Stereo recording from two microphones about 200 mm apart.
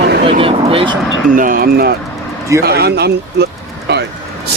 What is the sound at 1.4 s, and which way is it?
Speech, 45° right (ahead or behind).